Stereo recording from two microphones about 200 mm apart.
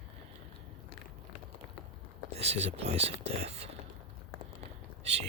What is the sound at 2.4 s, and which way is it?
Speech, 30° right (ahead or behind).